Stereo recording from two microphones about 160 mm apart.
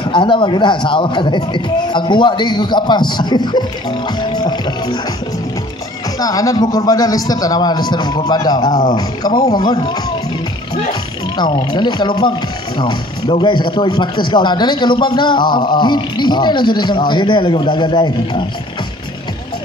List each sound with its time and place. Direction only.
0.0 s speech: 30° left (ahead or behind)
6.1 s speech: 20° left (ahead or behind)